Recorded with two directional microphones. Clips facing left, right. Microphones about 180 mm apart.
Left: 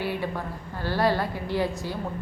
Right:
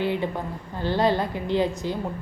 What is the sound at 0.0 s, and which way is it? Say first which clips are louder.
A woman's voice: right 4 dB; 20° right (ahead or behind).